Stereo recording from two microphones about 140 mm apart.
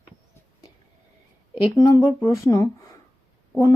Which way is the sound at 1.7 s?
20° left (ahead or behind).